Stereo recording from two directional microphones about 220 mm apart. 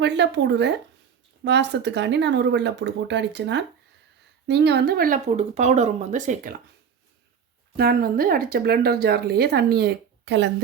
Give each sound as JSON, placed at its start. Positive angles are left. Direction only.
{"t": 0.0, "sound": "speech", "side_deg": -50}
{"t": 7.8, "sound": "speech", "side_deg": -45}